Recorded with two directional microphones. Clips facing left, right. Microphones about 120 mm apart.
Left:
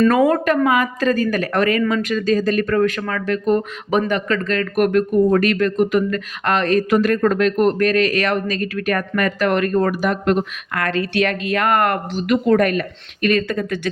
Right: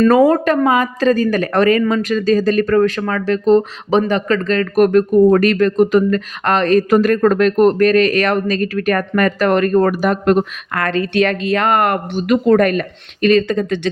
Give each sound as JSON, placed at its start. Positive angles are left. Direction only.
{"t": 0.1, "sound": "speech", "side_deg": -30}
{"t": 12.5, "sound": "speech", "side_deg": -40}
{"t": 13.2, "sound": "speech", "side_deg": -25}